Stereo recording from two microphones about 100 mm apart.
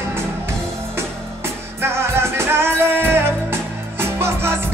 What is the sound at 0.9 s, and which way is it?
Music, 25° right (ahead or behind).